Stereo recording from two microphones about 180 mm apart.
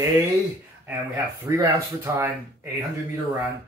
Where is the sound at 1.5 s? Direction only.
15° right (ahead or behind).